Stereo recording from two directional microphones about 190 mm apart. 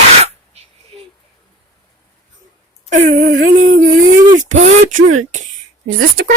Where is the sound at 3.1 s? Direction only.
85° right.